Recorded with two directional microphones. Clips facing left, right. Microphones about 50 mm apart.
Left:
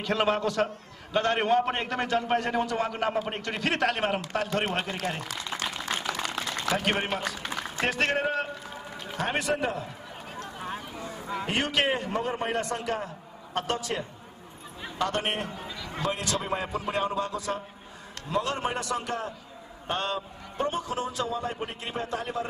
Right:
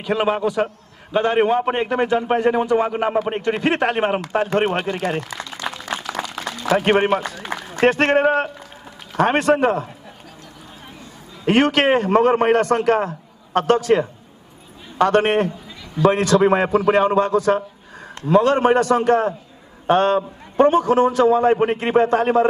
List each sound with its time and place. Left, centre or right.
0.0 s a man's voice: centre; by 5.5 s right
6.1 s a sound: centre
6.8 s a man's voice: right
11.4 s a man's voice: right